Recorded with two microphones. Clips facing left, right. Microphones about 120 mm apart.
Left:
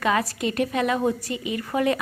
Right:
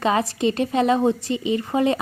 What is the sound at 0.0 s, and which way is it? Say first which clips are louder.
A woman's voice: right 3 dB; 25° right (ahead or behind).